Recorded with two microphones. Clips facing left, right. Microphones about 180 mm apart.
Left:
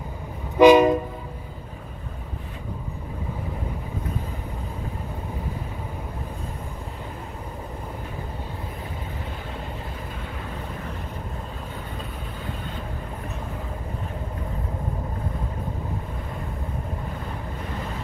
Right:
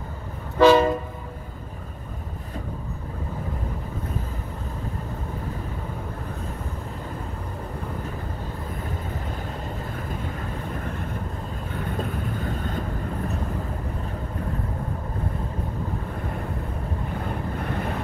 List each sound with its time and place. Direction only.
0.6 s train: 15° left (ahead or behind)